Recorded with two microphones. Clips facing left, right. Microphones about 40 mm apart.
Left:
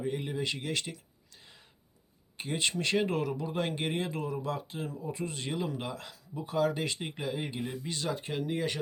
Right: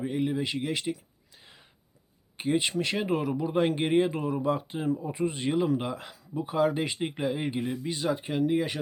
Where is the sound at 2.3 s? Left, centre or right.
Centre.